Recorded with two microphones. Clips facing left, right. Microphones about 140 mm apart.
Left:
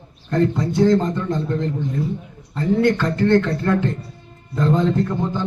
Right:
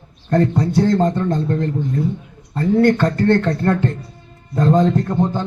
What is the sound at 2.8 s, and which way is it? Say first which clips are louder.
A man's voice: right 4 dB; 50° right (ahead or behind).